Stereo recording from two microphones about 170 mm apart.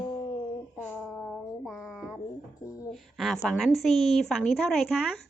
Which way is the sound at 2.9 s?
Centre (ahead or behind).